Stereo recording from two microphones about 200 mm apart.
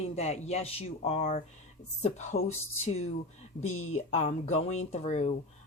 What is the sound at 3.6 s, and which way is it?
Speech, 90° left.